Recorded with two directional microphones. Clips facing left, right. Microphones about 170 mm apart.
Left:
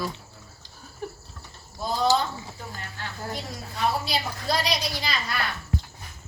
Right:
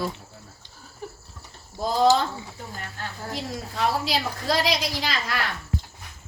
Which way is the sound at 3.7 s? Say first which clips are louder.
Right 1 dB; 90° right.